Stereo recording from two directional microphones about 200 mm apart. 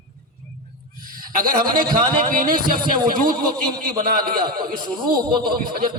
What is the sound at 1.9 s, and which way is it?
A man's voice, 45° right (ahead or behind).